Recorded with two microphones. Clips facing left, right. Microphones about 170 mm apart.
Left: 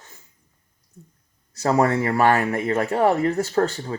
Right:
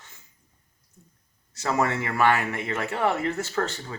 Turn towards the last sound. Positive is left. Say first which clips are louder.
# left 7 dB
turn(degrees=35)  # may be behind; listen again after turning